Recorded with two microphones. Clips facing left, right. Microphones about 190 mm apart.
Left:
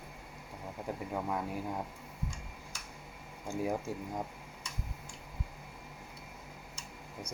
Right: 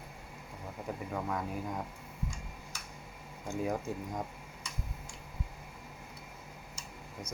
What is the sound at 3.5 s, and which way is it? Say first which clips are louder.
Speech: even; 10° left (ahead or behind).